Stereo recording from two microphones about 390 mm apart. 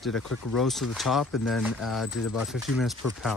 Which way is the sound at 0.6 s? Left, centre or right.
Centre.